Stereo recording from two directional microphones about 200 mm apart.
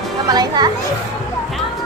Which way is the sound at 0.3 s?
20° right (ahead or behind).